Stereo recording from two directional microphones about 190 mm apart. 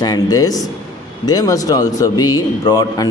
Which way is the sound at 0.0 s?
20° left (ahead or behind).